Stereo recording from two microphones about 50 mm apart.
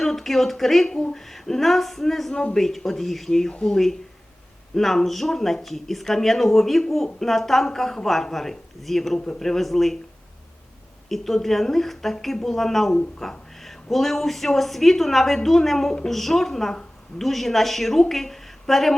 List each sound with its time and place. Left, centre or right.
0.0 s speech: centre
3.5 s speech: centre
4.7 s speech: centre
11.1 s speech: centre
13.1 s a sound: centre
13.9 s a woman's voice: centre